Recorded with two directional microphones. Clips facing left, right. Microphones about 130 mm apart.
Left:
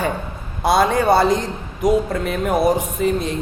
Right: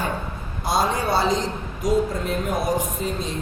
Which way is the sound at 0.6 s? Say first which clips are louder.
Left 6 dB; 65° left (ahead or behind).